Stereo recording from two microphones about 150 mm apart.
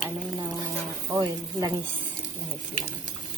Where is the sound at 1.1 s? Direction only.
20° right (ahead or behind).